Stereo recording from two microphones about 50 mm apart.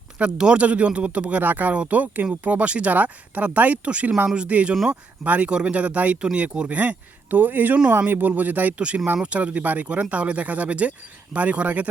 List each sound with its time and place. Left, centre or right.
0.2 s speech: centre
4.7 s speech: centre
5.2 s speech: right
9.2 s speech: right